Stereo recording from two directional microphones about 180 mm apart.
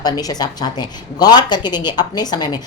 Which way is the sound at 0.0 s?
20° left (ahead or behind).